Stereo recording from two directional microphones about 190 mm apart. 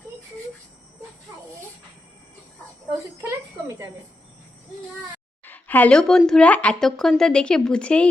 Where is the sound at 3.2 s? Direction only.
15° right (ahead or behind).